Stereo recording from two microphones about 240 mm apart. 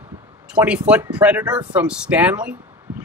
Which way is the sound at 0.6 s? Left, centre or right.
Centre.